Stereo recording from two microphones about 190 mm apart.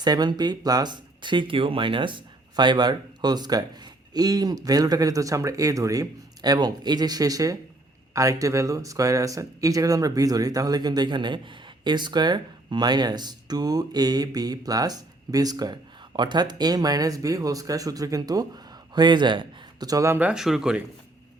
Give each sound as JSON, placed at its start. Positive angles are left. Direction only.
{"t": 0.0, "sound": "speech", "side_deg": -20}